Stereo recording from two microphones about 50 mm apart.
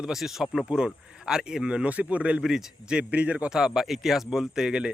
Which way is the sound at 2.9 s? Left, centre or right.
Right.